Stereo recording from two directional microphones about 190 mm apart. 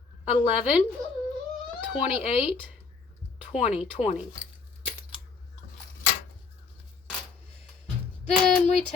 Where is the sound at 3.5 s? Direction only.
30° left (ahead or behind).